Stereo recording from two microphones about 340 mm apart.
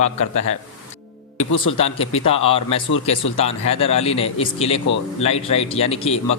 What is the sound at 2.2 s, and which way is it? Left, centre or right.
Speech, centre.